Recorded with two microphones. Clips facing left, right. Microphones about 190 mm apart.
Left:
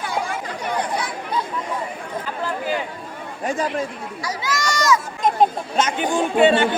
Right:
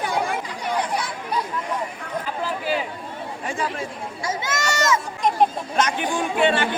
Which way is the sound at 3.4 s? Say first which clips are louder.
Left 5 dB; 40° left (ahead or behind).